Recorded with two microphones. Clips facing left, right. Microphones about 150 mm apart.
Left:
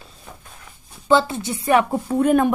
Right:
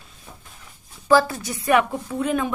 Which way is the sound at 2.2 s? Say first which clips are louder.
Left 7 dB; 55° left (ahead or behind).